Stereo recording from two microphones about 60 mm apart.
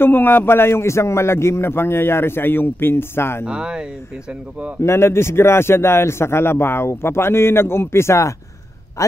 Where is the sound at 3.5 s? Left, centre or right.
Centre.